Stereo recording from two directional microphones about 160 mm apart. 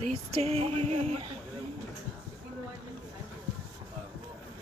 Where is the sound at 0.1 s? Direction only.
40° right (ahead or behind).